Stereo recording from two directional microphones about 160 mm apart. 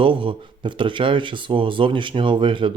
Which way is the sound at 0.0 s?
35° right (ahead or behind).